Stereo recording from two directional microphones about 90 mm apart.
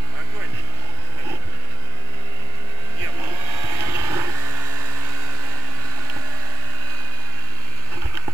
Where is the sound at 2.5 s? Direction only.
30° right (ahead or behind).